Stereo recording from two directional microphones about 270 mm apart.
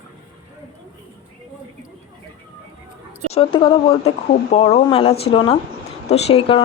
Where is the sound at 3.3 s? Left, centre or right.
Left.